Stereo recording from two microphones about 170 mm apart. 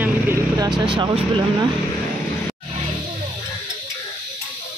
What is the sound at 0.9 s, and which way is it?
Speech, 30° right (ahead or behind).